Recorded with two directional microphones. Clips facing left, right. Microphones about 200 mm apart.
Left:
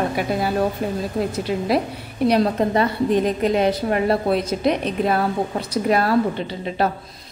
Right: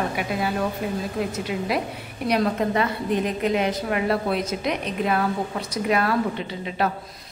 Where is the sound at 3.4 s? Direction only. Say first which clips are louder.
Left 4 dB; 35° left (ahead or behind).